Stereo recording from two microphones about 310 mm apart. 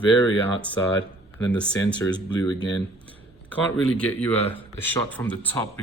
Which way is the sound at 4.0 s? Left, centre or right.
Centre.